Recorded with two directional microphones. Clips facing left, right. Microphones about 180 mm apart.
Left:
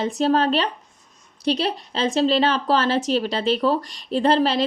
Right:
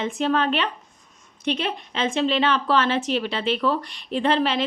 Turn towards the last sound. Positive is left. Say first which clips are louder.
# left 3 dB
turn(degrees=40)  # may be behind; listen again after turning